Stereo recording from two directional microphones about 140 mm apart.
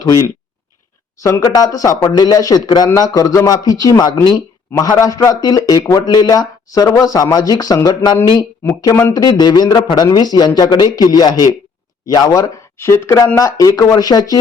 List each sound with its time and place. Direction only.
1.2 s a man's voice: 20° left (ahead or behind)